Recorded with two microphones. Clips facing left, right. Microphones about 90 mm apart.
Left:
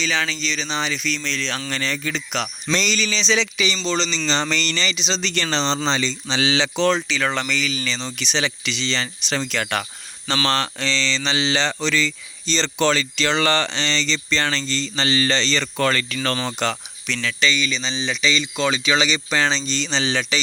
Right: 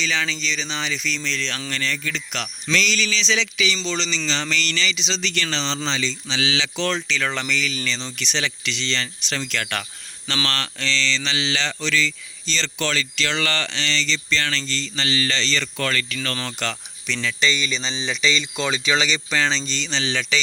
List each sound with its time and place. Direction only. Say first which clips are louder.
0.0 s speech: left 1 dB; 10° left (ahead or behind)
1.7 s speech: left 1 dB; 20° left (ahead or behind)
2.7 s speech: even; 35° left (ahead or behind)
3.8 s speech: left 3 dB; 20° left (ahead or behind)
4.3 s speech: left 3 dB; 35° left (ahead or behind)
6.7 s speech: left 6 dB; 20° left (ahead or behind)
7.1 s speech: left 2 dB; 10° left (ahead or behind)
17.1 s speech: left 1 dB; centre (ahead or behind); by 20.4 s 20° left (ahead or behind)